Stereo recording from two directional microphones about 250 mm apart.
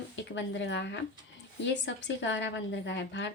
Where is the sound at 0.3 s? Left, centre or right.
Left.